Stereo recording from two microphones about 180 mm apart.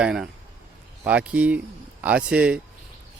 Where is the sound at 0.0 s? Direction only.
5° right (ahead or behind).